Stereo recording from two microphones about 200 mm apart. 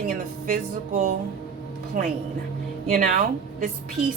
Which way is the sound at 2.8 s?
45° right (ahead or behind).